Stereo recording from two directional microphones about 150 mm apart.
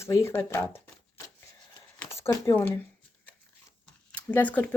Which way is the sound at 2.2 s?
20° left (ahead or behind).